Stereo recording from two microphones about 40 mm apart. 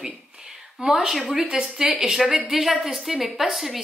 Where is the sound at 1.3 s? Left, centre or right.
Centre.